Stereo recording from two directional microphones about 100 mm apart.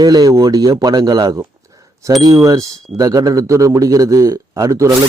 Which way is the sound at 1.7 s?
35° right (ahead or behind).